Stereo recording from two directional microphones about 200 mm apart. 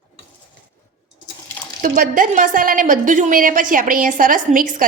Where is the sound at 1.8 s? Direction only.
45° right (ahead or behind).